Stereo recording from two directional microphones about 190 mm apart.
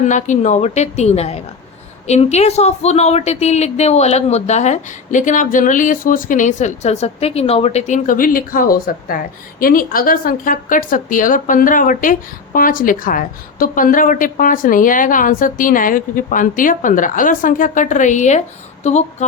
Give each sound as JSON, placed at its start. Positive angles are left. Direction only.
{"t": 0.0, "sound": "a woman's voice", "side_deg": 40}